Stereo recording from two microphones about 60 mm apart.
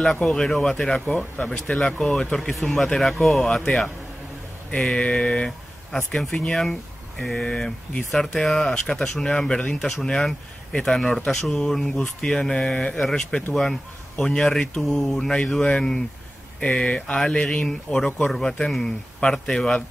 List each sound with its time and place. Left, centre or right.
0.0 s speech: centre
1.0 s speech: left
1.5 s speech: centre
2.3 s speech: centre
3.4 s speech: centre